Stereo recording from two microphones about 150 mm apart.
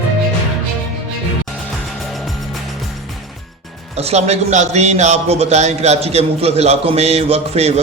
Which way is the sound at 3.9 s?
45° right (ahead or behind).